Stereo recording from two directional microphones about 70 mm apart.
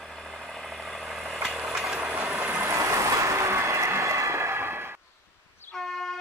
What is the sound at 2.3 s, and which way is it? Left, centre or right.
Vehicle, right.